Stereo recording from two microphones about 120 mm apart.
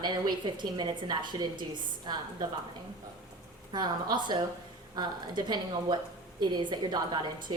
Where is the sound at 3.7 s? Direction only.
40° right (ahead or behind).